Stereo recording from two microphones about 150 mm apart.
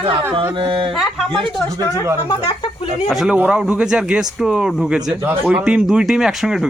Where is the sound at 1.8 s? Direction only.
20° left (ahead or behind).